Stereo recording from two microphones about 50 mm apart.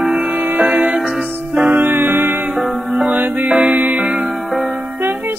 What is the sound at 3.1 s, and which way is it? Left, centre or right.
Music, right.